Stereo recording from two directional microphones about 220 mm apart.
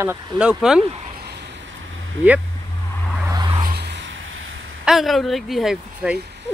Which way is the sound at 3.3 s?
20° right (ahead or behind).